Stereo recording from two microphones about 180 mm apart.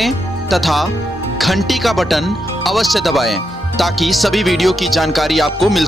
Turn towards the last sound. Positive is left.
turn(degrees=0)  # may be behind; listen again after turning